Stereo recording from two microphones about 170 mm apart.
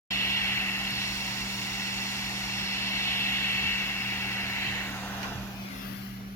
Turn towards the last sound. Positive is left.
turn(degrees=15)  # may be behind; listen again after turning